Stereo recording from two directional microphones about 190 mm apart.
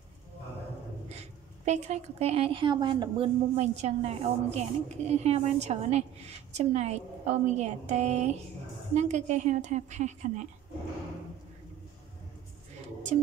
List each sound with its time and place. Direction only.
1.7 s a woman's voice: 35° right (ahead or behind)